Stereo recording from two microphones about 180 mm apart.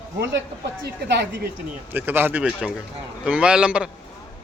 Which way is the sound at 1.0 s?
70° right (ahead or behind).